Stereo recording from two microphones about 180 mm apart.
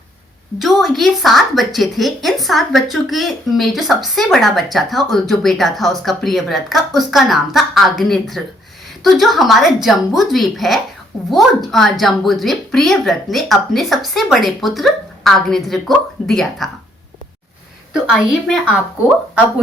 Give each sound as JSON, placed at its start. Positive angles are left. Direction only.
{"t": 0.6, "sound": "speech", "side_deg": 0}
{"t": 17.9, "sound": "speech", "side_deg": 0}